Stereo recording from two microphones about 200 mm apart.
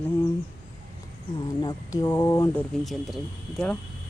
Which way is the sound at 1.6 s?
20° left (ahead or behind).